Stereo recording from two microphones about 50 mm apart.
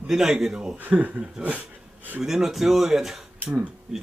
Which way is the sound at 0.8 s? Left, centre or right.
Right.